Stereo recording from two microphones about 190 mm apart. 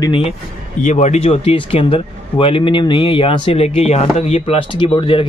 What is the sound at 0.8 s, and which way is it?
Speech, 40° left (ahead or behind).